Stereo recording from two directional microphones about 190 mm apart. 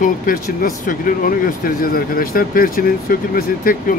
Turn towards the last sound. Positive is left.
turn(degrees=50)  # may be behind; listen again after turning